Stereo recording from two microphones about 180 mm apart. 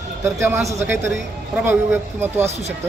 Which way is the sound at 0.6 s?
40° right (ahead or behind).